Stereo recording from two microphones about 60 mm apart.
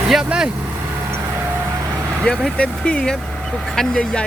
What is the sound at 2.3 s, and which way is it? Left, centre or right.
Speech, left.